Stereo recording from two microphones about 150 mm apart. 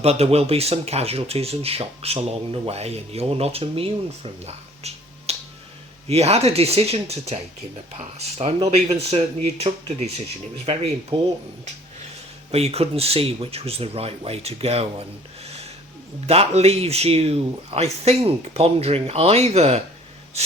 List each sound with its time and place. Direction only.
0.0 s speech: 45° right (ahead or behind)
12.5 s speech: 45° right (ahead or behind)
16.2 s speech: 40° right (ahead or behind)